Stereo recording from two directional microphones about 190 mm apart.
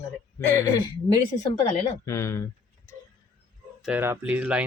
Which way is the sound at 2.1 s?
15° left (ahead or behind).